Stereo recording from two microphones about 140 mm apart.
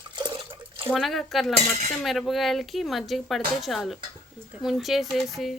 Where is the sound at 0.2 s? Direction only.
35° right (ahead or behind).